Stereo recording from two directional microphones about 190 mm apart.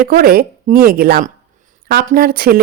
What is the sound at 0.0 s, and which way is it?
Speech, 50° right (ahead or behind).